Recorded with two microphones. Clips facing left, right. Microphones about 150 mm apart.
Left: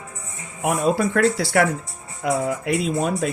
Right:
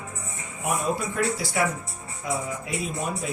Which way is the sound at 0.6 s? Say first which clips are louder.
Left 7 dB; 90° left.